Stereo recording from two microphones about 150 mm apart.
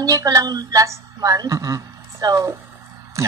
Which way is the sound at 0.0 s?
25° right (ahead or behind).